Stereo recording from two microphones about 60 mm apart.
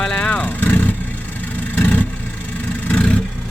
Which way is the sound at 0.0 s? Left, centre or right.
Centre.